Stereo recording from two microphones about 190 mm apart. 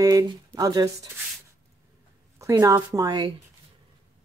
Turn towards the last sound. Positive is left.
turn(degrees=-20)  # may be behind; listen again after turning